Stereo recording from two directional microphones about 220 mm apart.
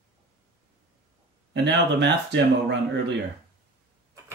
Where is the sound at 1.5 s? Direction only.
50° right (ahead or behind).